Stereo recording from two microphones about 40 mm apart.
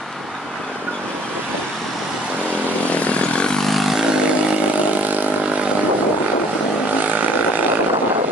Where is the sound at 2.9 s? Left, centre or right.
Left.